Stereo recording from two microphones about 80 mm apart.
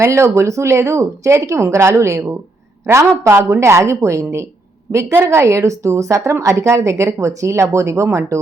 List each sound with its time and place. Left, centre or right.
0.0 s a woman's voice: right